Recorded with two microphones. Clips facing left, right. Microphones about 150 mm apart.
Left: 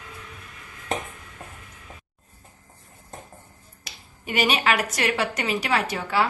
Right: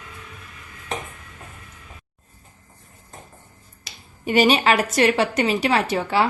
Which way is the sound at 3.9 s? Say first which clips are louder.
Right 7 dB; 30° right (ahead or behind).